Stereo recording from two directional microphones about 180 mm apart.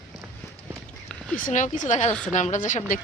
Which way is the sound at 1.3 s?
45° left (ahead or behind).